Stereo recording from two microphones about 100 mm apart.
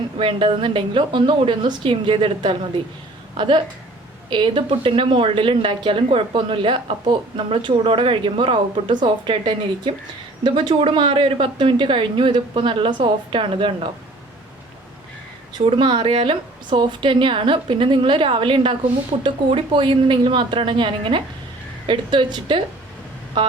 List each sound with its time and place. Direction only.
0.2 s speech: 60° right (ahead or behind)
15.5 s speech: 55° right (ahead or behind)